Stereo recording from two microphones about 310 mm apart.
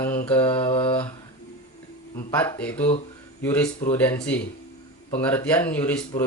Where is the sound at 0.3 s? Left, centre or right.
Centre.